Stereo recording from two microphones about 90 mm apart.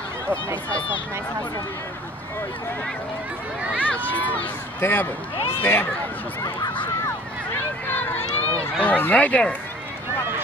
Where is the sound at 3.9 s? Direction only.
20° left (ahead or behind).